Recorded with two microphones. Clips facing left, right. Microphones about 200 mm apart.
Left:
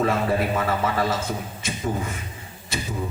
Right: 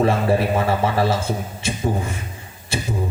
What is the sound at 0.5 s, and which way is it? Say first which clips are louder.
Speech: right 4 dB; 30° right (ahead or behind).